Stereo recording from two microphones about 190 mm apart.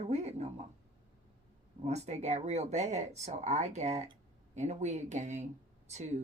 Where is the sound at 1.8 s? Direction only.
35° right (ahead or behind).